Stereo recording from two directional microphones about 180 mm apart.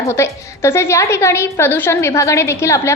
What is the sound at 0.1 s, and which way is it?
A woman's voice, 15° left (ahead or behind).